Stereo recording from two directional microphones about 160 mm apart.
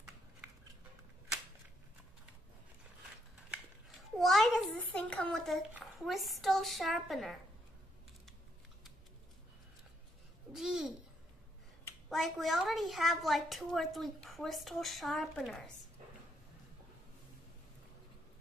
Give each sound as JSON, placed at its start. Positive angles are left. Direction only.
{"t": 3.4, "sound": "a child's voice", "side_deg": -5}
{"t": 10.5, "sound": "a child's voice", "side_deg": -5}
{"t": 12.1, "sound": "a woman's voice", "side_deg": 0}